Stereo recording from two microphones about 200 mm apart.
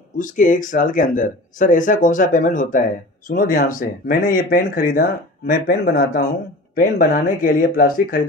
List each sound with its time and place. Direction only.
0.2 s speech: 40° left (ahead or behind)